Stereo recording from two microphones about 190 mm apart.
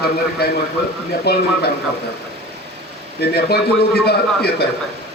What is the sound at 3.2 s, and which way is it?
A man's voice, 55° left (ahead or behind).